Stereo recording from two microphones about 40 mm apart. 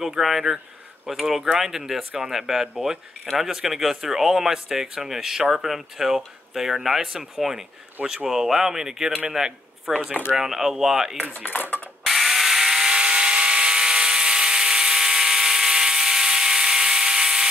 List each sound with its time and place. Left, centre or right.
0.0 s speech: centre
8.0 s speech: right
8.3 s speech: centre
11.4 s cutlery: left
12.0 s electric toothbrush: centre